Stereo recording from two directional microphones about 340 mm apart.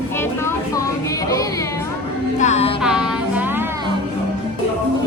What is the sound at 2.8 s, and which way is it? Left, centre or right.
Music, centre.